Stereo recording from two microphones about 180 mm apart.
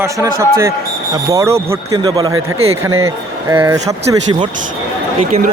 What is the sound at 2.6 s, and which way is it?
Speech, 35° right (ahead or behind).